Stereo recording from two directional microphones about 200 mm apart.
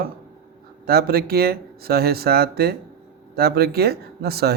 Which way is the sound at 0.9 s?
50° right (ahead or behind).